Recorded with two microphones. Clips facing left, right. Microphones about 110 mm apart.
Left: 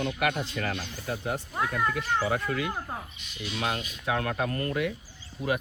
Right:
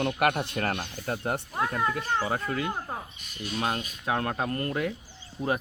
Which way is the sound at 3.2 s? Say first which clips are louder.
Right 2 dB; 45° right (ahead or behind).